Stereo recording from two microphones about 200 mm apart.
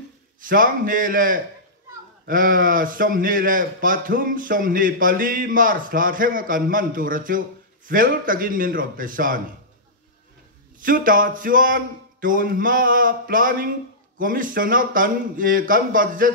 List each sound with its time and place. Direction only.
0.4 s a man's voice: 45° right (ahead or behind)
10.8 s a man's voice: 45° right (ahead or behind)